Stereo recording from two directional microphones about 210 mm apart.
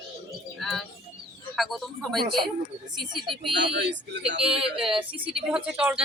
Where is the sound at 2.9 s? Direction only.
20° right (ahead or behind).